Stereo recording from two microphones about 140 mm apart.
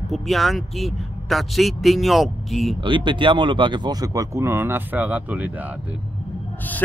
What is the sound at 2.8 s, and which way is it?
Speech, 35° right (ahead or behind).